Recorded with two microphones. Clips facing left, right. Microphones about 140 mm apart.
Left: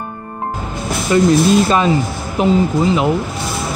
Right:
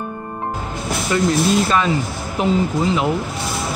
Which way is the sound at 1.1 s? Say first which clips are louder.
Left 6 dB; 20° left (ahead or behind).